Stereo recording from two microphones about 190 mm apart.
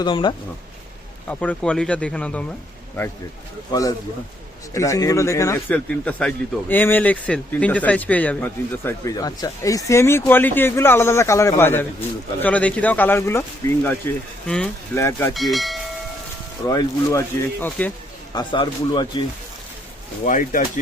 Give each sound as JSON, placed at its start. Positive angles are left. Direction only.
{"t": 0.0, "sound": "speech", "side_deg": 25}
{"t": 1.3, "sound": "speech", "side_deg": 5}
{"t": 3.7, "sound": "speech", "side_deg": 20}
{"t": 15.3, "sound": "speech", "side_deg": 0}
{"t": 16.6, "sound": "speech", "side_deg": 15}
{"t": 18.3, "sound": "speech", "side_deg": 25}
{"t": 20.2, "sound": "speech", "side_deg": 45}